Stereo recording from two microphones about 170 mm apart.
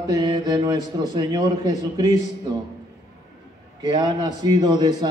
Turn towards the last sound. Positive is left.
turn(degrees=-25)  # may be behind; listen again after turning